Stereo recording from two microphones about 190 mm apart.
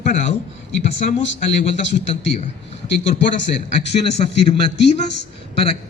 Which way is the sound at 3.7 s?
35° left (ahead or behind).